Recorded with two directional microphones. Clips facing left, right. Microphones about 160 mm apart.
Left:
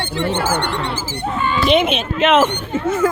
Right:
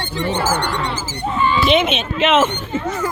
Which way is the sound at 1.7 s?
Centre (ahead or behind).